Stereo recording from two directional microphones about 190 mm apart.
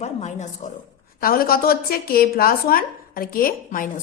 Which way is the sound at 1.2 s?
50° left (ahead or behind).